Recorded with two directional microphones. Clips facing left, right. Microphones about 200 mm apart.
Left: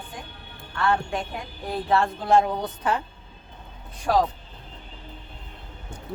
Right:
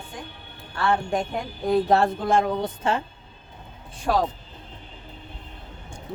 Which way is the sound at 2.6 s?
25° right (ahead or behind).